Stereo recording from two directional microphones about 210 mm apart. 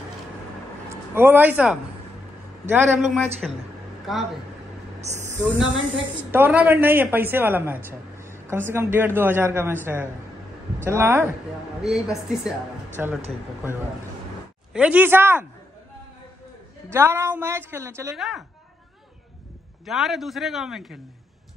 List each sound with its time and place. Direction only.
0.8 s a man's voice: 10° right (ahead or behind)
5.0 s a woman's voice: 35° right (ahead or behind)
6.3 s a man's voice: 10° right (ahead or behind)
14.7 s a man's voice: 5° right (ahead or behind)
16.9 s a man's voice: 10° right (ahead or behind)
18.1 s a man's voice: centre (ahead or behind)
19.9 s a man's voice: centre (ahead or behind)